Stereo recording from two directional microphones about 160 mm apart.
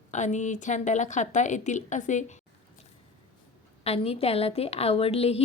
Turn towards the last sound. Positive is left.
turn(degrees=40)  # may be behind; listen again after turning